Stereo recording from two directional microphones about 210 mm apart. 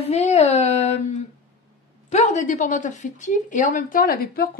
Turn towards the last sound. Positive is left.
turn(degrees=45)  # may be behind; listen again after turning